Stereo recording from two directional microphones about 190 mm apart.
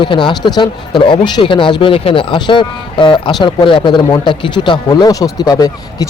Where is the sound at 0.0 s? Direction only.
25° left (ahead or behind).